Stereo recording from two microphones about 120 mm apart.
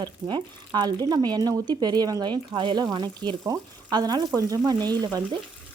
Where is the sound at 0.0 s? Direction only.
40° right (ahead or behind).